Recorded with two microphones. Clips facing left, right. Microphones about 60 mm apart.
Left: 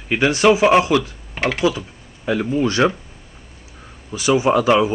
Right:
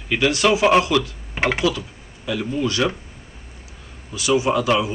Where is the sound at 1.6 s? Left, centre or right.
Left.